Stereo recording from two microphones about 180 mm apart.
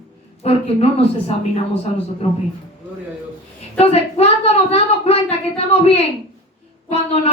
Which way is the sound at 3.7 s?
35° left (ahead or behind).